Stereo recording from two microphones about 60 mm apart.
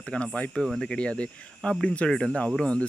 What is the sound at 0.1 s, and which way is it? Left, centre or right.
Speech, centre.